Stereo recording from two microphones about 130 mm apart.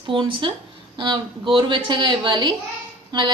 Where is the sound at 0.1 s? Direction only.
40° right (ahead or behind).